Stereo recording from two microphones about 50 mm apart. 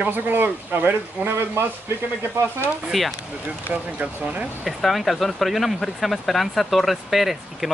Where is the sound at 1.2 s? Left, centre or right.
Right.